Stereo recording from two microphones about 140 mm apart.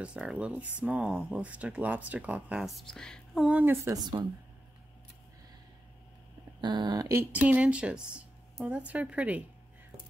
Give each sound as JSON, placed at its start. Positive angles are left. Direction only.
{"t": 0.0, "sound": "speech", "side_deg": -5}
{"t": 3.4, "sound": "speech", "side_deg": -15}
{"t": 6.6, "sound": "a sound", "side_deg": -35}
{"t": 7.2, "sound": "speech", "side_deg": -10}